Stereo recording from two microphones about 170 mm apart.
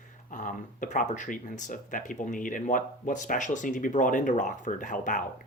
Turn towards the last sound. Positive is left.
turn(degrees=50)  # may be behind; listen again after turning